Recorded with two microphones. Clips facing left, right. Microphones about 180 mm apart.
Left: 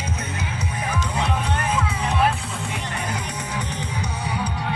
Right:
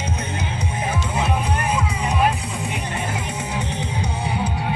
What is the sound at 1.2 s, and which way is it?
Music, 10° right (ahead or behind).